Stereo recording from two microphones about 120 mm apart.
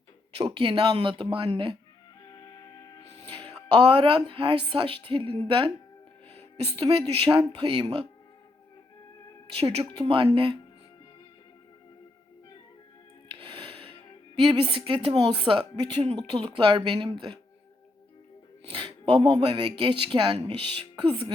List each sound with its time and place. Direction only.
0.5 s a woman's voice: 45° right (ahead or behind)
2.2 s music: 35° left (ahead or behind)
3.8 s a woman's voice: 45° right (ahead or behind)
6.7 s a woman's voice: 50° right (ahead or behind)
9.6 s a woman's voice: 55° right (ahead or behind)
13.2 s music: 45° right (ahead or behind)
14.3 s a woman's voice: 45° right (ahead or behind)
18.6 s a woman's voice: 45° right (ahead or behind)